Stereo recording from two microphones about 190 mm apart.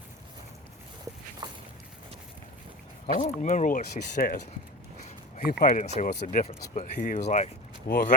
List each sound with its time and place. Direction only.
1.4 s walk: 25° right (ahead or behind)
3.1 s speech: 40° left (ahead or behind)
5.5 s speech: 50° left (ahead or behind)
5.8 s speech: 35° left (ahead or behind)
7.9 s speech: 50° left (ahead or behind)